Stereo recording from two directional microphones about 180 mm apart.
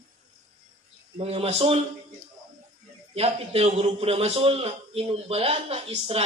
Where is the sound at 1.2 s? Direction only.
35° right (ahead or behind).